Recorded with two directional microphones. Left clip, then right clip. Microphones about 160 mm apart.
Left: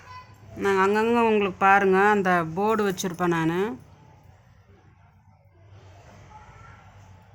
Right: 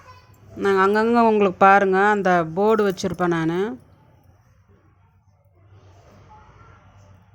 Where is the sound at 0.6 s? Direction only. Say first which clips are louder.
Right 4 dB; 30° right (ahead or behind).